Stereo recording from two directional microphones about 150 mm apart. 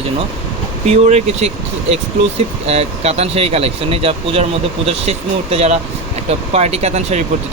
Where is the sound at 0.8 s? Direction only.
45° right (ahead or behind).